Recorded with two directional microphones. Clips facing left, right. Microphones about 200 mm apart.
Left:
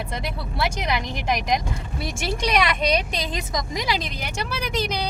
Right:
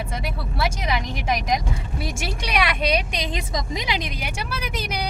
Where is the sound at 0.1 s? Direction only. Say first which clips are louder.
Even; 5° right (ahead or behind).